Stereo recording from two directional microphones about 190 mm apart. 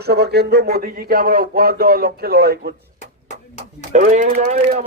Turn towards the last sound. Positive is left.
turn(degrees=-45)  # may be behind; listen again after turning